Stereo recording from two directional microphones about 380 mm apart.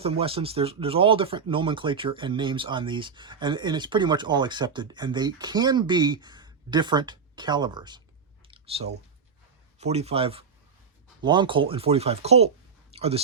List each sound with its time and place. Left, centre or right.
0.0 s speech: centre
8.4 s clicking: centre
9.8 s speech: centre
12.9 s a sound: centre